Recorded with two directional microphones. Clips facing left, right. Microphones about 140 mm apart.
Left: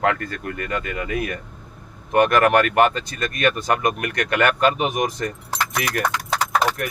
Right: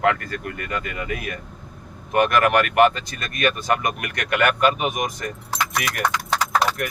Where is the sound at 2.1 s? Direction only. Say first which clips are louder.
Left 2 dB; 35° left (ahead or behind).